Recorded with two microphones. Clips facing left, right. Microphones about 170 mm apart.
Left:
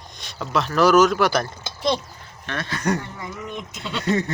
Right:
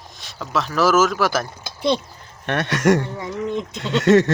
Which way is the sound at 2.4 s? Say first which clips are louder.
Right 7 dB; 70° right (ahead or behind).